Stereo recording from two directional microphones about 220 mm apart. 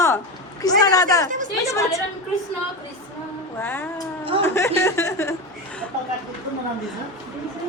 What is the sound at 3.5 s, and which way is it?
Speech, 10° left (ahead or behind).